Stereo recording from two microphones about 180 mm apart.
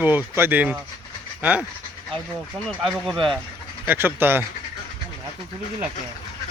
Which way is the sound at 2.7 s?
Centre (ahead or behind).